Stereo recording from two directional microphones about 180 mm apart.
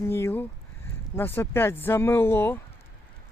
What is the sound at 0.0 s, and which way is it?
Speech, 15° left (ahead or behind).